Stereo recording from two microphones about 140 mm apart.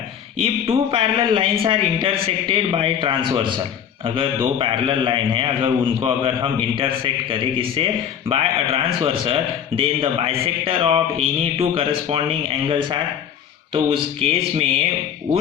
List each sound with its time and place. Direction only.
0.4 s speech: 45° right (ahead or behind)